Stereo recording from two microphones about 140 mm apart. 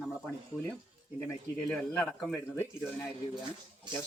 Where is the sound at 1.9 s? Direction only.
15° left (ahead or behind).